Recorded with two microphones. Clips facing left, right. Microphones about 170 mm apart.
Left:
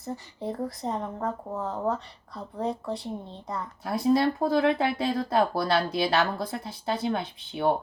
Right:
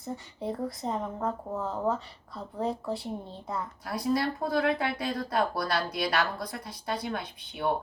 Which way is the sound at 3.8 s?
25° left (ahead or behind).